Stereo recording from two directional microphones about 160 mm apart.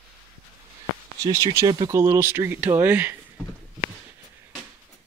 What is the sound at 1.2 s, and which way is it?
Speech, 20° right (ahead or behind).